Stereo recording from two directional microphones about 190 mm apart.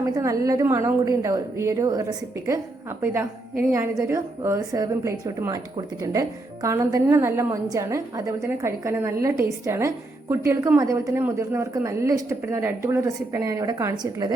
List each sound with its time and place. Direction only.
0.0 s a woman's voice: 15° right (ahead or behind)